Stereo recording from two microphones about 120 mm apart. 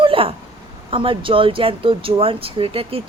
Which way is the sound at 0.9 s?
45° right (ahead or behind).